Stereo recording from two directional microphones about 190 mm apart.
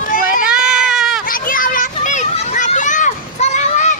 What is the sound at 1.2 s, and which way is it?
Children playing, 50° left (ahead or behind).